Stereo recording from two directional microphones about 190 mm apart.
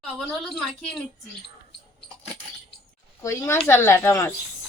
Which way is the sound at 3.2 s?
15° left (ahead or behind).